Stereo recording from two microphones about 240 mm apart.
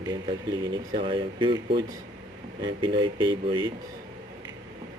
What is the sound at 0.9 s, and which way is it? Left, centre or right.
Speech, right.